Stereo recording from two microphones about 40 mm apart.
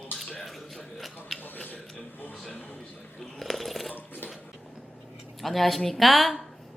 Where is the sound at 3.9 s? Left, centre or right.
Left.